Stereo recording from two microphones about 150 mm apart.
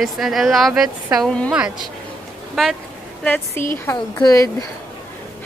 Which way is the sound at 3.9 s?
25° left (ahead or behind).